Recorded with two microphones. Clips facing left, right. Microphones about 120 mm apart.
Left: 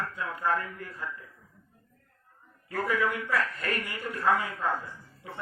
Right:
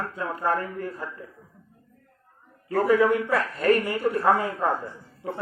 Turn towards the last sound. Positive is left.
turn(degrees=-40)  # may be behind; listen again after turning